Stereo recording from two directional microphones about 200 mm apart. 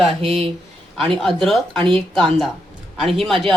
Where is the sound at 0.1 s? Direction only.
30° right (ahead or behind).